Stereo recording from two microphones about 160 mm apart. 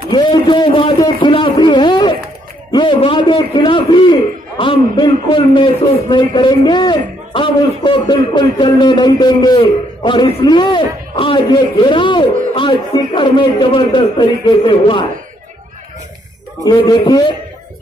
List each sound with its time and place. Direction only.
0.1 s a man's voice: 25° left (ahead or behind)
1.2 s a sound: 30° left (ahead or behind)
2.7 s a man's voice: 30° left (ahead or behind)
16.6 s a man's voice: 25° left (ahead or behind)